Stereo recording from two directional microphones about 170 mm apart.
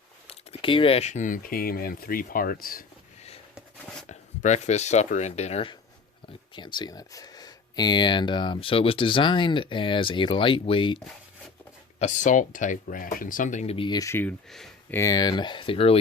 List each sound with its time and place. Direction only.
0.3 s speech: 30° left (ahead or behind); by 2.8 s 60° left (ahead or behind)
4.1 s speech: 45° left (ahead or behind)
6.5 s speech: 25° left (ahead or behind)
11.9 s speech: 45° left (ahead or behind); by 14.9 s 5° left (ahead or behind)
14.9 s speech: 20° left (ahead or behind)